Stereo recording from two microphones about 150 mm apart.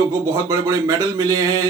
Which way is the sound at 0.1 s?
20° right (ahead or behind).